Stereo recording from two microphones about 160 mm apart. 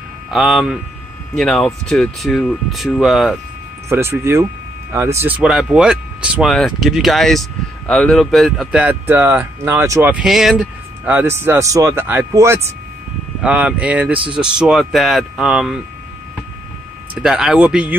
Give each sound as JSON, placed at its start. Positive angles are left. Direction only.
{"t": 0.3, "sound": "speech", "side_deg": 0}
{"t": 3.9, "sound": "speech", "side_deg": -15}
{"t": 17.1, "sound": "speech", "side_deg": -5}